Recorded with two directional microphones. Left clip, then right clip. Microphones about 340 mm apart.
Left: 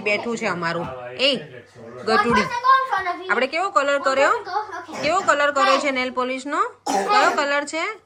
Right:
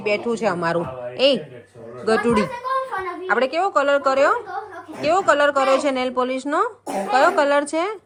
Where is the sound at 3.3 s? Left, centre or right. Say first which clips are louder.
Right 2 dB; centre.